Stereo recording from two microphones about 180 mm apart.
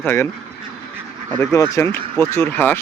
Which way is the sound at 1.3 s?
15° left (ahead or behind).